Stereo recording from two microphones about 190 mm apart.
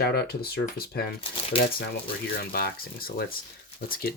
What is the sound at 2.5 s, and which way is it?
Speech, 55° left (ahead or behind).